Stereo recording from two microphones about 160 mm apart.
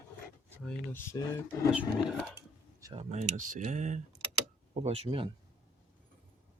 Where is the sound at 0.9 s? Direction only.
20° left (ahead or behind).